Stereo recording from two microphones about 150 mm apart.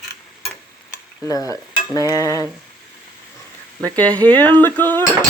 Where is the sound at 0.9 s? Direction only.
25° left (ahead or behind).